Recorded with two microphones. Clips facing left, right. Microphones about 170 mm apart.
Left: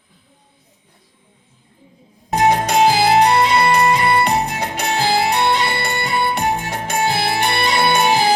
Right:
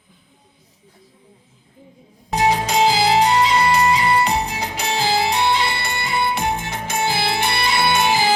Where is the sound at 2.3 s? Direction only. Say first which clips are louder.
Left 3 dB; 55° left (ahead or behind).